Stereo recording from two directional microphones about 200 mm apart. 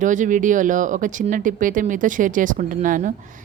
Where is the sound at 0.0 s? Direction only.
40° right (ahead or behind).